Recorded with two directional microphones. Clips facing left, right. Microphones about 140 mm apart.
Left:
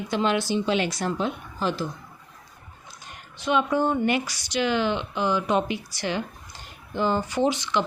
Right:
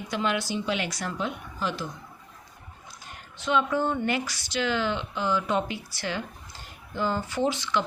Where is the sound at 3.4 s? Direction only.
15° left (ahead or behind).